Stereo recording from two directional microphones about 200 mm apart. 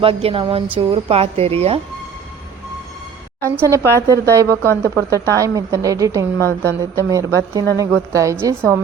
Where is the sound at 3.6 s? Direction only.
15° right (ahead or behind).